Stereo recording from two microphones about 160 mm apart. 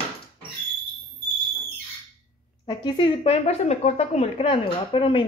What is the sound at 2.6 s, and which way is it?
A woman's voice, 30° left (ahead or behind).